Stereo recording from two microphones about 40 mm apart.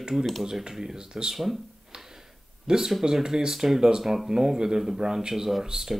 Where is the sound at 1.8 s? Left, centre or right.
Centre.